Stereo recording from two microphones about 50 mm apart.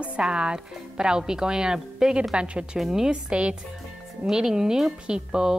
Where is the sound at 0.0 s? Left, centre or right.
Right.